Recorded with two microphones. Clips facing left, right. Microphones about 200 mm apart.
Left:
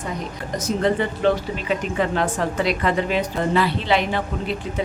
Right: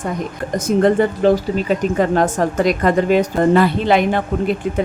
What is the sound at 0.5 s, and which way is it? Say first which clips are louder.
Speech: right 7 dB; 50° right (ahead or behind).